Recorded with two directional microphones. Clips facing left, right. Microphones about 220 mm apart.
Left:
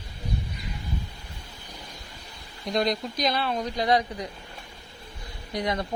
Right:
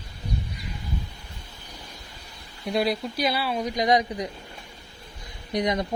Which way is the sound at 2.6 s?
5° right (ahead or behind).